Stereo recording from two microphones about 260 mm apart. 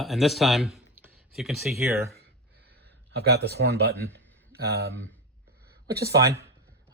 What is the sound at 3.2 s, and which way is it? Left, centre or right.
Speech, right.